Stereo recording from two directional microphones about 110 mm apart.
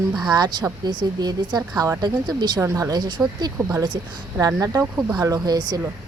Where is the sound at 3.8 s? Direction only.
40° right (ahead or behind).